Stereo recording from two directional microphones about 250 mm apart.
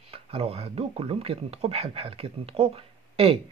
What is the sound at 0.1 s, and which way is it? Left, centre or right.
Speech, right.